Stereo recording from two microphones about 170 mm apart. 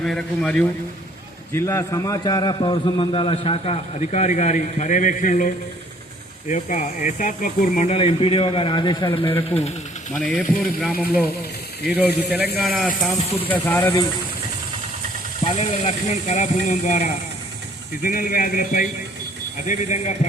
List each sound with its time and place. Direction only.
0.0 s speech: 5° left (ahead or behind)
1.5 s a man's voice: 15° left (ahead or behind); by 5.5 s 50° left (ahead or behind)
6.5 s a man's voice: 45° left (ahead or behind); by 9.3 s 30° left (ahead or behind)
9.5 s speech: 15° left (ahead or behind)
15.4 s speech: 40° left (ahead or behind)